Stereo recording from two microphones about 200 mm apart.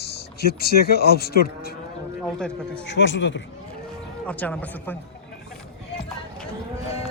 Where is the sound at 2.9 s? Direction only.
65° left (ahead or behind).